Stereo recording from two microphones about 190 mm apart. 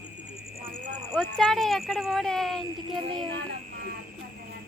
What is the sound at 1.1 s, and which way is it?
Speech, 5° left (ahead or behind).